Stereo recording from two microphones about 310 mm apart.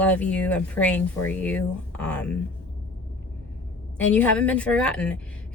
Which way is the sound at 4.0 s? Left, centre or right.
Centre.